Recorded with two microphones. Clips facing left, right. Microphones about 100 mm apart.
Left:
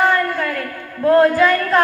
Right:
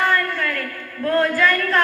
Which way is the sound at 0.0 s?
20° left (ahead or behind).